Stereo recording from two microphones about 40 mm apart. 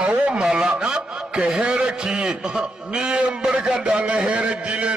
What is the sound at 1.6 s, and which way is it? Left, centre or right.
Speech, right.